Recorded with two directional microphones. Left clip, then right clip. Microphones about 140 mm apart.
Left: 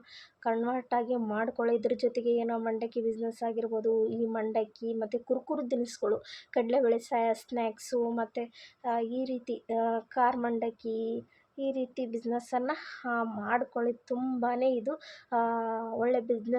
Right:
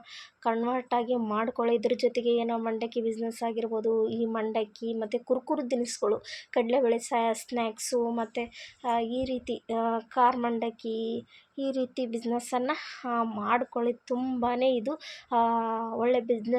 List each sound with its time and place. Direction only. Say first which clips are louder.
0.4 s a woman's voice: right 2 dB; 15° right (ahead or behind)